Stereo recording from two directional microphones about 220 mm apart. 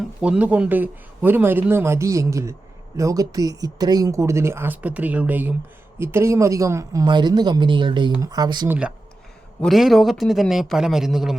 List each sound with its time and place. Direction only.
0.2 s speech: 5° right (ahead or behind)
9.6 s a man's voice: centre (ahead or behind)